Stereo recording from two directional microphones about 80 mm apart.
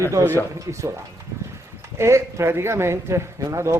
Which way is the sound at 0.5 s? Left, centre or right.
Right.